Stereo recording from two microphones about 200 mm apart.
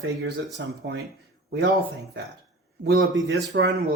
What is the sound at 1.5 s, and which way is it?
Speech, 60° right (ahead or behind).